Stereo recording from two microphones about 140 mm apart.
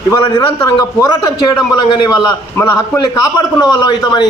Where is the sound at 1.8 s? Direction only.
35° left (ahead or behind).